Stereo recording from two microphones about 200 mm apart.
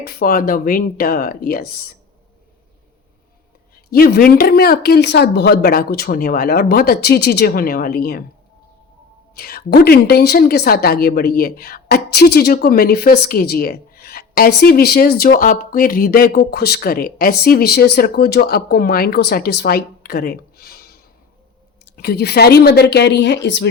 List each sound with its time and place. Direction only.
0.0 s speech: 45° left (ahead or behind)
3.9 s speech: 50° left (ahead or behind)
9.3 s speech: 50° left (ahead or behind)
21.9 s a woman's voice: 50° left (ahead or behind)